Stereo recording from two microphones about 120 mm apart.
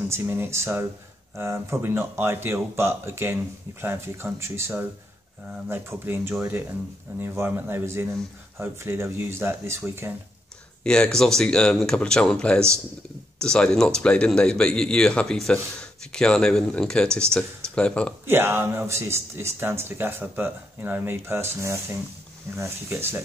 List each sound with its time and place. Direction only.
0.1 s speech: 20° right (ahead or behind)
10.8 s a man's voice: 5° left (ahead or behind)
18.2 s speech: 20° right (ahead or behind)